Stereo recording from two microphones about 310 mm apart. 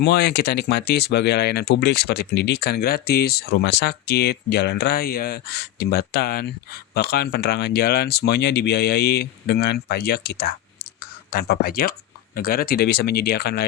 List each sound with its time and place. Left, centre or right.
0.0 s speech: left